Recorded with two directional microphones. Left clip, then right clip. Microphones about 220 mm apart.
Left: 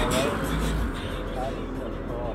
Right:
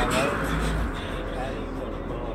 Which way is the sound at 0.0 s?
30° left (ahead or behind).